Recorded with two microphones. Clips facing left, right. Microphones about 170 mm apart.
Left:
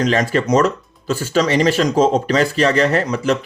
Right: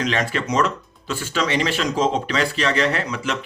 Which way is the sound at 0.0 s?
40° left (ahead or behind).